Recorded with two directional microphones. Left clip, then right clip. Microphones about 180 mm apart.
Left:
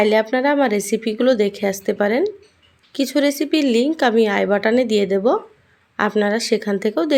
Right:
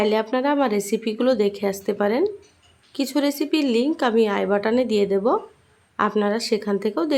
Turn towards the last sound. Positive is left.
turn(degrees=15)  # may be behind; listen again after turning